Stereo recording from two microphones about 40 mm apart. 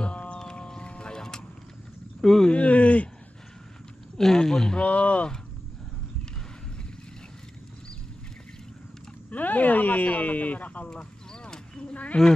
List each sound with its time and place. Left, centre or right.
0.0 s music: left
0.4 s music: centre
2.2 s speech: centre
2.5 s speech: left
4.2 s speech: centre
4.7 s speech: left
9.3 s speech: left
10.9 s a sound: left
11.9 s a sound: left